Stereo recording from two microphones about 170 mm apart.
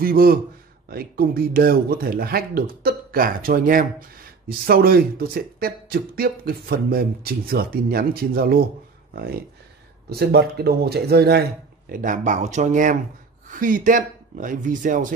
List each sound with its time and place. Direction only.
0.0 s speech: 60° right (ahead or behind)
11.9 s speech: 50° right (ahead or behind)